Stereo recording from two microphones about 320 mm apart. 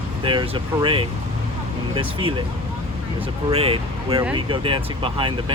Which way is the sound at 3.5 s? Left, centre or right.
Centre.